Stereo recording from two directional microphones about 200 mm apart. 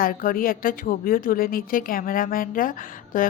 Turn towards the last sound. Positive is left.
turn(degrees=45)  # may be behind; listen again after turning